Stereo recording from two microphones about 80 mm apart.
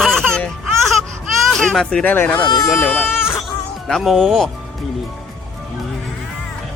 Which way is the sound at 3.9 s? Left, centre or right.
Centre.